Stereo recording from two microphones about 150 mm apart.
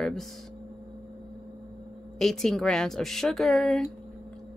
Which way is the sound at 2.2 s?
Centre (ahead or behind).